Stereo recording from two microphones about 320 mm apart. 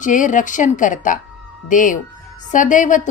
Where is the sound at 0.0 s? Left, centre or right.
Left.